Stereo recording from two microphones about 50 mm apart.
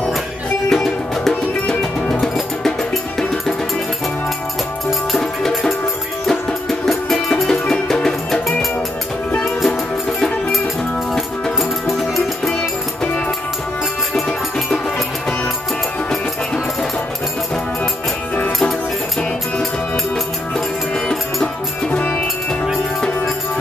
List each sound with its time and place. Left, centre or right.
0.7 s music: centre
6.2 s music: centre
14.2 s music: centre
20.5 s music: centre
21.8 s music: left